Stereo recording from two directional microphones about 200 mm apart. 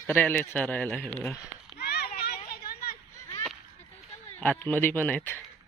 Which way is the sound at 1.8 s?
55° left (ahead or behind).